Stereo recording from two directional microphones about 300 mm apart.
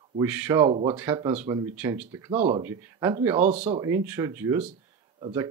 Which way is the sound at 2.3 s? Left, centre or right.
Right.